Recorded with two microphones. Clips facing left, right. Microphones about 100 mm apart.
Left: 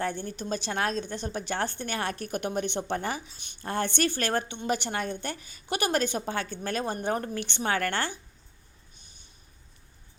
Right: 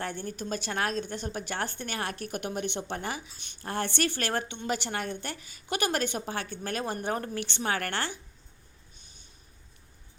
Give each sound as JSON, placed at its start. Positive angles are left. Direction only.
{"t": 0.0, "sound": "a woman's voice", "side_deg": 30}